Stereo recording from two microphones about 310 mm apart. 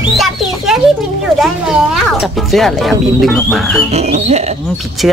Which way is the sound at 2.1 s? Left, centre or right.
Centre.